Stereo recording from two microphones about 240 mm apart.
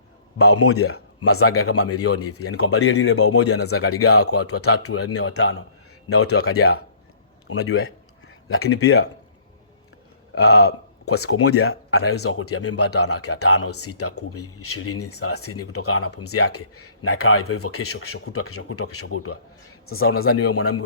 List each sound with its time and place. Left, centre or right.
0.3 s speech: left
10.3 s speech: left